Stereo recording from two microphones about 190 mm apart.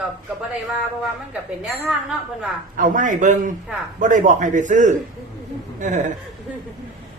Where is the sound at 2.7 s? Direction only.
45° right (ahead or behind).